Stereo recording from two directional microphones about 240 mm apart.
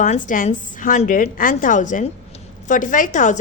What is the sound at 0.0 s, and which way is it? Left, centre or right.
Speech, left.